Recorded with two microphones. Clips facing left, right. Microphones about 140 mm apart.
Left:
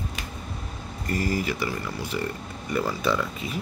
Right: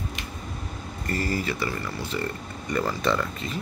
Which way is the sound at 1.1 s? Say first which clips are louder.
Left 1 dB; 15° left (ahead or behind).